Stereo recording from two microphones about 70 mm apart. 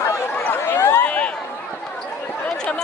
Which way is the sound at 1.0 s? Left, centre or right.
Centre.